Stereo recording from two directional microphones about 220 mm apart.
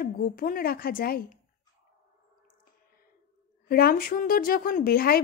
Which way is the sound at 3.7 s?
45° left (ahead or behind).